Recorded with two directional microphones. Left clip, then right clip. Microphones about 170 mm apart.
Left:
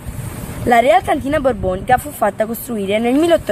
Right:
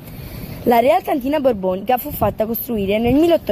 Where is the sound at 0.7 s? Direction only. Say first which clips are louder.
Left 2 dB; 25° right (ahead or behind).